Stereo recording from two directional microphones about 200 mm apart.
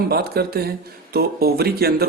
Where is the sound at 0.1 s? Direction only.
50° right (ahead or behind).